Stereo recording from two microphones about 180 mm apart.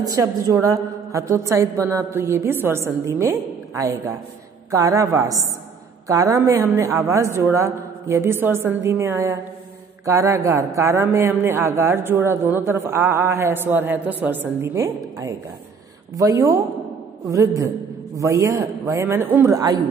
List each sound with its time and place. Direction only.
0.0 s a woman's voice: 20° right (ahead or behind)